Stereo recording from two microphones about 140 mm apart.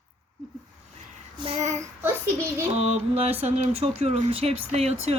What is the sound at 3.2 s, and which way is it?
Speech, 50° right (ahead or behind).